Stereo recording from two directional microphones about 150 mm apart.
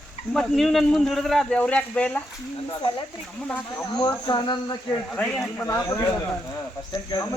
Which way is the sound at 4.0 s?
30° left (ahead or behind).